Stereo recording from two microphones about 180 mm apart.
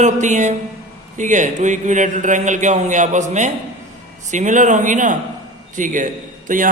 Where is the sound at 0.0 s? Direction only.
40° right (ahead or behind).